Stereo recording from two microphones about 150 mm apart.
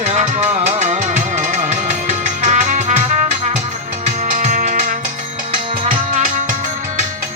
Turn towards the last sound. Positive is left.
turn(degrees=-60)  # may be behind; listen again after turning